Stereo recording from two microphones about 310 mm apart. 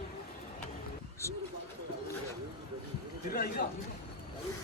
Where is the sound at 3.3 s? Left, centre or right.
Left.